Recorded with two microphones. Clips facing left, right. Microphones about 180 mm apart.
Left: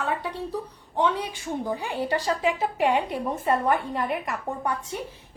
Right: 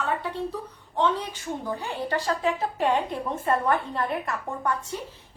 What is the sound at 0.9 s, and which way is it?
A woman's voice, 10° left (ahead or behind).